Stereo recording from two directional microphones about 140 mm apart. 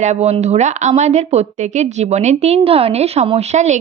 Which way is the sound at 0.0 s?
55° right (ahead or behind).